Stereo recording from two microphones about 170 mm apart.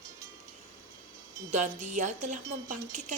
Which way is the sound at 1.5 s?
45° right (ahead or behind).